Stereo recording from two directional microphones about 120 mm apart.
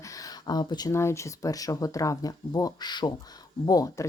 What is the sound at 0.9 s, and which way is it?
Speech, 20° left (ahead or behind).